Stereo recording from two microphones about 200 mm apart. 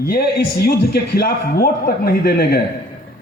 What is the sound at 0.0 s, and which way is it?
A man's voice, 50° left (ahead or behind).